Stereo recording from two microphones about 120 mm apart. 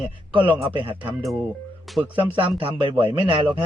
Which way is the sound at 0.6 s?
45° right (ahead or behind).